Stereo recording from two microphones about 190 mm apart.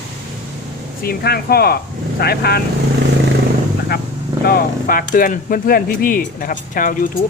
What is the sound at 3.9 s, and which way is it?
Speech, 55° left (ahead or behind).